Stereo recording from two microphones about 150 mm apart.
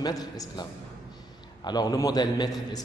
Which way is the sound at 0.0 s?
25° left (ahead or behind).